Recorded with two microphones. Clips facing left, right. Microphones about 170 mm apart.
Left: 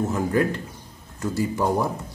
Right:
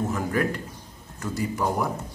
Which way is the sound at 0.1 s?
25° left (ahead or behind).